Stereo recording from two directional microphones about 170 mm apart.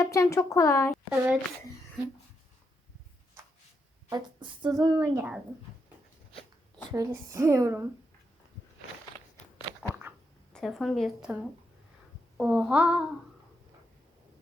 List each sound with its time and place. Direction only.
0.0 s speech: 20° left (ahead or behind)
1.1 s a woman's voice: 5° right (ahead or behind)
4.1 s a woman's voice: 25° right (ahead or behind)
6.9 s a woman's voice: 20° right (ahead or behind)
9.9 s a sound: 10° right (ahead or behind)
10.5 s speech: centre (ahead or behind)
12.4 s a woman's voice: 5° right (ahead or behind)